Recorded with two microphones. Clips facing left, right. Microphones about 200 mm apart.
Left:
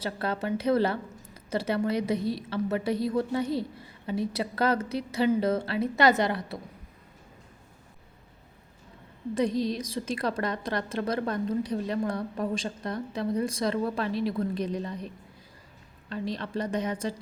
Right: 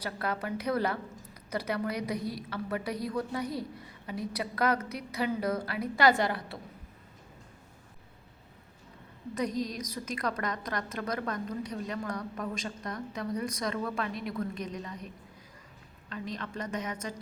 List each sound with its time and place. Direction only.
0.0 s a woman's voice: 25° left (ahead or behind)
9.3 s a woman's voice: 30° left (ahead or behind)
16.0 s a woman's voice: 30° left (ahead or behind)